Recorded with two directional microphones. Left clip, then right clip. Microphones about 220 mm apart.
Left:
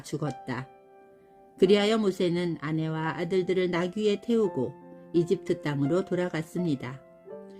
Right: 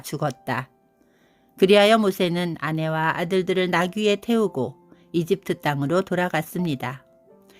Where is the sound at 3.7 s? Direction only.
35° right (ahead or behind).